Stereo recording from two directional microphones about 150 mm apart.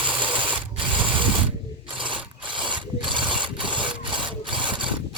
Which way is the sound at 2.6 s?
30° right (ahead or behind).